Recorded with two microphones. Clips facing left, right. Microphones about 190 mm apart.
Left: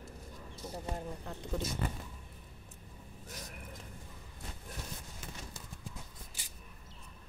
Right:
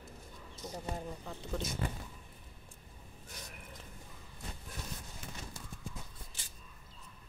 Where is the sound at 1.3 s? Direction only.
10° left (ahead or behind).